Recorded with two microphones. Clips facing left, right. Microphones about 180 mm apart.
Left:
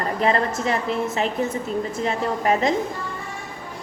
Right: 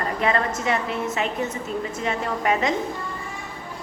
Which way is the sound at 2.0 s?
35° left (ahead or behind).